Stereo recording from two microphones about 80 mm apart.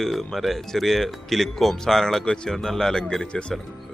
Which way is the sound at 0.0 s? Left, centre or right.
Centre.